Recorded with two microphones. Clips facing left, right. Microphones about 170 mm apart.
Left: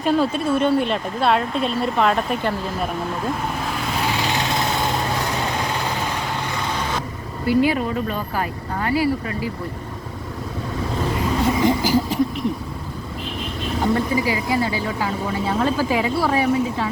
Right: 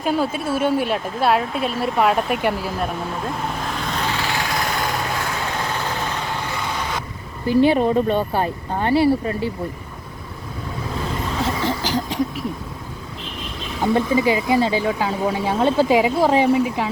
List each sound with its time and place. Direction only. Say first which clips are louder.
0.0 s speech: left 2 dB; 5° right (ahead or behind)
4.1 s lawn mower: left 1 dB; 20° left (ahead or behind)
7.6 s speech: right 4 dB; 25° right (ahead or behind)
11.3 s a sound: left 5 dB; 10° left (ahead or behind)
13.9 s speech: right 6 dB; 20° right (ahead or behind)